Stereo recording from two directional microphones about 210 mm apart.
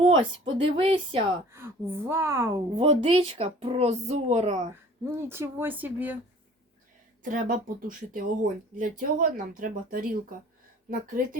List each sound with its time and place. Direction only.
0.0 s speech: 25° right (ahead or behind)
1.5 s speech: 10° right (ahead or behind)
2.7 s speech: 30° right (ahead or behind)
4.7 s speech: 10° right (ahead or behind)
7.2 s speech: 40° right (ahead or behind)